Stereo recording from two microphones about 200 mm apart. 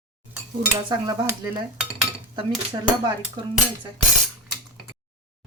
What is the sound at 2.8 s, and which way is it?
Speech, 20° right (ahead or behind).